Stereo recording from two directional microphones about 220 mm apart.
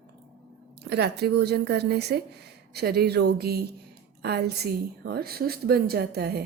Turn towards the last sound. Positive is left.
turn(degrees=-45)  # may be behind; listen again after turning